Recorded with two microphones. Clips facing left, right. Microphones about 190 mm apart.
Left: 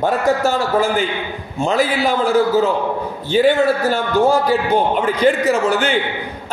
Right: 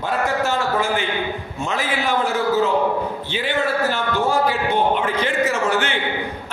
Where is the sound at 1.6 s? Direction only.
35° left (ahead or behind).